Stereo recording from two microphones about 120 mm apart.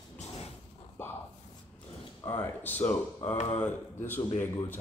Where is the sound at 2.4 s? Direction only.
15° left (ahead or behind).